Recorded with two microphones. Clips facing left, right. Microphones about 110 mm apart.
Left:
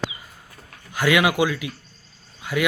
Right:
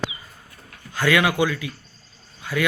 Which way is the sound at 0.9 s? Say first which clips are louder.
Left 1 dB; 15° left (ahead or behind).